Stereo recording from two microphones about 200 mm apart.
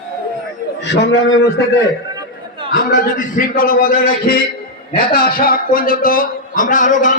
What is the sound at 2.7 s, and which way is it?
Speech, 40° left (ahead or behind).